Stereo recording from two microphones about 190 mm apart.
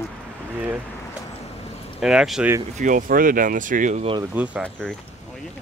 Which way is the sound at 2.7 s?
45° right (ahead or behind).